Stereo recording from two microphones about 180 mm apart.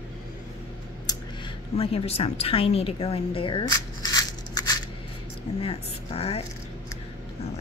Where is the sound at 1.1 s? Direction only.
20° left (ahead or behind).